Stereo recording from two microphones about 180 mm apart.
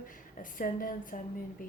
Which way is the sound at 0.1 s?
50° left (ahead or behind).